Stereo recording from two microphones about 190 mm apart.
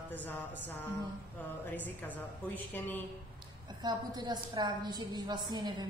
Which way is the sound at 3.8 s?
20° right (ahead or behind).